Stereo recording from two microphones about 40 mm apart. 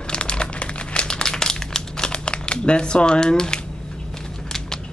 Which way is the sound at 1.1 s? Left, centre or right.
Centre.